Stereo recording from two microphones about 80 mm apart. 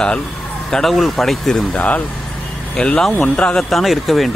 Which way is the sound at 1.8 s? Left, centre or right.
Centre.